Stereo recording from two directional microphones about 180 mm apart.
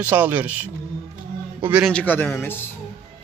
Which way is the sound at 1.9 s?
10° left (ahead or behind).